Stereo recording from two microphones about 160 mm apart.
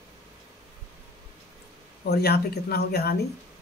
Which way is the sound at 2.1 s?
80° left.